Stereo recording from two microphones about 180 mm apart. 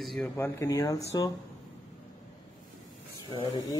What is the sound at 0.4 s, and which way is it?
Speech, 15° left (ahead or behind).